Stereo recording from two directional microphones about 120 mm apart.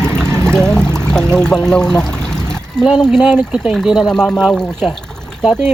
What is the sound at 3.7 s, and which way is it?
Speech, centre (ahead or behind).